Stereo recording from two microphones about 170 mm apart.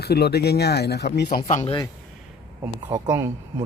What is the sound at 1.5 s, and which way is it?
Speech, 45° left (ahead or behind).